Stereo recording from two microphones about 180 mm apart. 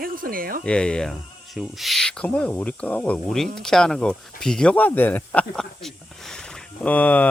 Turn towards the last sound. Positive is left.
turn(degrees=10)  # may be behind; listen again after turning